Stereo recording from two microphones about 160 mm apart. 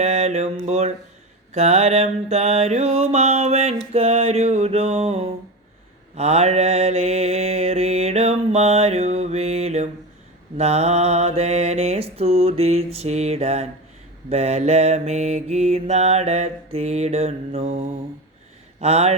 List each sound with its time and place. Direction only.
0.0 s mantra: 45° right (ahead or behind)